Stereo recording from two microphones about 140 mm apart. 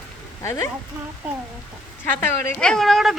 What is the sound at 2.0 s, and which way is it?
A woman's voice, 15° left (ahead or behind).